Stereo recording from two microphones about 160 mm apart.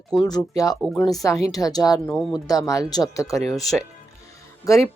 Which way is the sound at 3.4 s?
Centre (ahead or behind).